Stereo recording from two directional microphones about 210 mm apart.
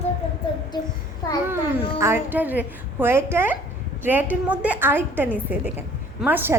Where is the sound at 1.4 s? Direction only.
10° right (ahead or behind).